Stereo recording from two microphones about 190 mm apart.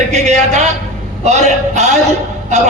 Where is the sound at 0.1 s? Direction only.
35° right (ahead or behind).